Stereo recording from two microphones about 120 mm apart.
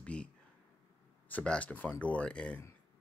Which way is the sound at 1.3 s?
10° left (ahead or behind).